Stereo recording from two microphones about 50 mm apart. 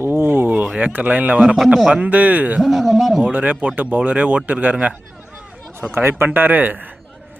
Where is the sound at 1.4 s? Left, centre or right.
Centre.